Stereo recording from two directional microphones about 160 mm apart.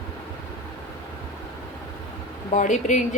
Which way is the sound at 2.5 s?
50° left (ahead or behind).